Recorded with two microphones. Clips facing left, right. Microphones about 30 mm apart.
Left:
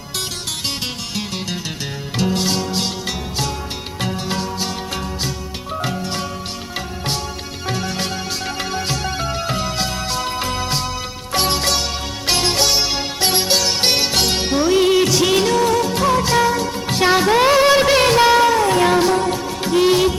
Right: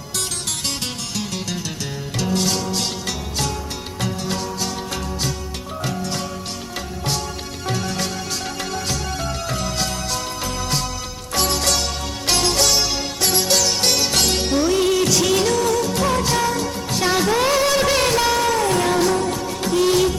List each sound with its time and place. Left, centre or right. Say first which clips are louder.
2.1 s music: left 2 dB; centre
4.0 s music: left 2 dB; left
5.8 s music: left 1 dB; left
7.7 s music: left 1 dB; centre
14.1 s music: left 1 dB; centre
16.0 s music of bollywood: left 6 dB; centre
18.5 s music: left 4 dB; centre